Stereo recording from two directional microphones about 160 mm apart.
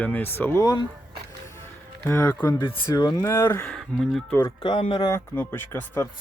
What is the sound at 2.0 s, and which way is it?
Speech, 15° left (ahead or behind).